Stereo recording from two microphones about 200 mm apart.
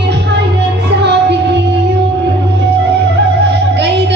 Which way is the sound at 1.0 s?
55° right (ahead or behind).